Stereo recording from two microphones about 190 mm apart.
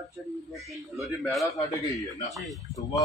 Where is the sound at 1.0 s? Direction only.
Centre (ahead or behind).